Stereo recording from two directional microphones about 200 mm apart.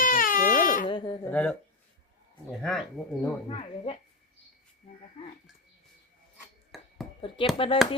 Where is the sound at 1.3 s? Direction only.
5° left (ahead or behind).